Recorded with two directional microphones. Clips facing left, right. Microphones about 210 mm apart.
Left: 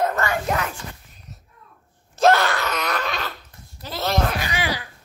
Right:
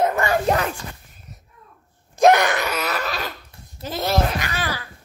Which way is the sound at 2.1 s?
15° right (ahead or behind).